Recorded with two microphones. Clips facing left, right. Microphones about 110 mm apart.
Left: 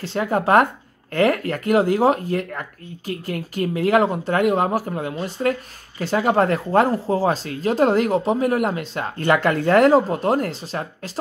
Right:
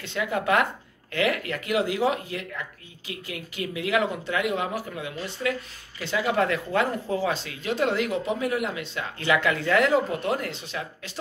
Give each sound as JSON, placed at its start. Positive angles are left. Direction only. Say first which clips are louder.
{"t": 0.0, "sound": "speech", "louder": "left 6 dB", "side_deg": 40}